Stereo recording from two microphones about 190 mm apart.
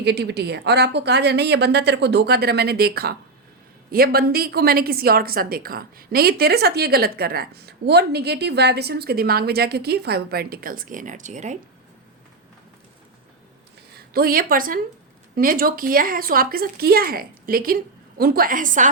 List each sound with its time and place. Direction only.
0.0 s a woman's voice: 60° right (ahead or behind); by 11.5 s 40° right (ahead or behind)
14.1 s a woman's voice: 50° right (ahead or behind)